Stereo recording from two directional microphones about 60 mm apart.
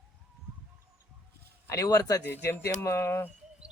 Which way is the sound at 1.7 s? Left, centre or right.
Left.